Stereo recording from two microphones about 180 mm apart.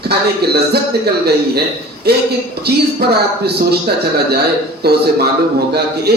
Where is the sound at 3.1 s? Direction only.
60° right (ahead or behind).